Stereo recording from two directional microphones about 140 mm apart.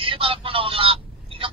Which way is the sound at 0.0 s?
40° right (ahead or behind).